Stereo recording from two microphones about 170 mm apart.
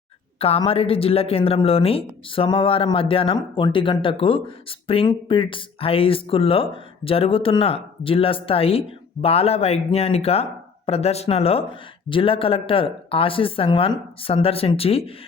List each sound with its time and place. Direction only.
0.3 s speech: 35° left (ahead or behind)